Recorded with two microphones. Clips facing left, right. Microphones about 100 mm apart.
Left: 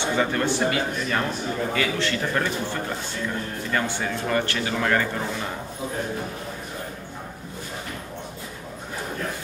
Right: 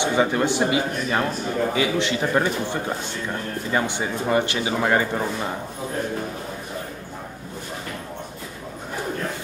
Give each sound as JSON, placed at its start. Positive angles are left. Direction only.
{"t": 0.0, "sound": "speech", "side_deg": -15}